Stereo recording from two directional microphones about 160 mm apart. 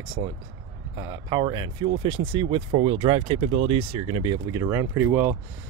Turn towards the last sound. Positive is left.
turn(degrees=-10)  # may be behind; listen again after turning